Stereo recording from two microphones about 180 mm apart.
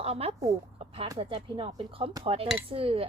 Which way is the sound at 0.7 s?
30° right (ahead or behind).